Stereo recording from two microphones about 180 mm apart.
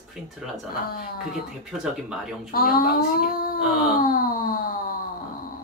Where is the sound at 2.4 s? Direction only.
55° left (ahead or behind).